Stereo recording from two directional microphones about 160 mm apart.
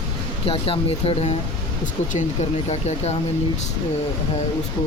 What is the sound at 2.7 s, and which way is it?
Speech, 45° left (ahead or behind).